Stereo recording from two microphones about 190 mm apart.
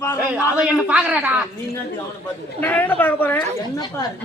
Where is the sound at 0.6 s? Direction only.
5° right (ahead or behind).